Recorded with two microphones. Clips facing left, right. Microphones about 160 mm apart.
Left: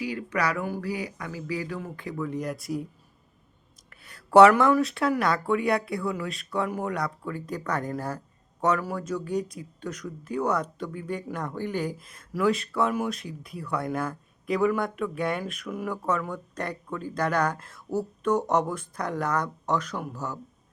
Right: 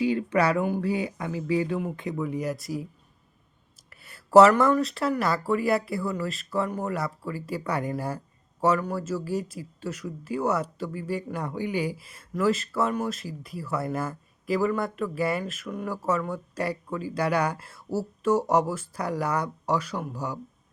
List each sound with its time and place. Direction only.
0.0 s speech: 25° right (ahead or behind); by 2.8 s centre (ahead or behind)
3.8 s a sound: 5° right (ahead or behind)
4.7 s speech: centre (ahead or behind)